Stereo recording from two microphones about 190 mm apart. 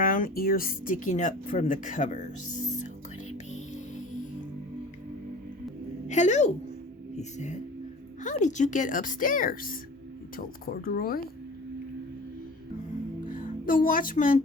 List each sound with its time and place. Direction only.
0.0 s a woman's voice: 50° left (ahead or behind)
6.1 s a woman's voice: 40° left (ahead or behind)
13.3 s speech: 45° left (ahead or behind)